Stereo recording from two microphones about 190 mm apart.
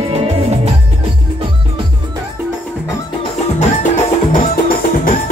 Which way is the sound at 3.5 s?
40° left (ahead or behind).